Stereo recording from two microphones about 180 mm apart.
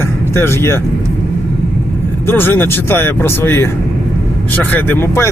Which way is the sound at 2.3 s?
10° left (ahead or behind).